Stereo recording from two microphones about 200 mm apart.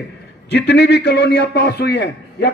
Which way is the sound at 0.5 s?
60° left (ahead or behind).